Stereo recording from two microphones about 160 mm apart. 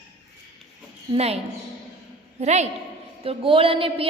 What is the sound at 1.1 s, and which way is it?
Speech, 40° right (ahead or behind).